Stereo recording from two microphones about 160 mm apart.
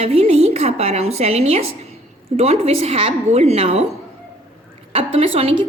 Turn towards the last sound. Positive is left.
turn(degrees=-35)  # may be behind; listen again after turning